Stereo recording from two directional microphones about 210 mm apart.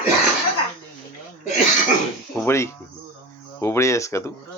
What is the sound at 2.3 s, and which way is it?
Speech, 10° left (ahead or behind).